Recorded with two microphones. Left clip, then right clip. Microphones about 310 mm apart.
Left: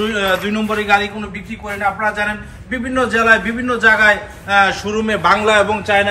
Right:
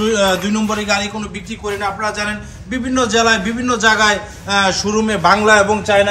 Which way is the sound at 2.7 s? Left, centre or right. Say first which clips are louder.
Even; centre.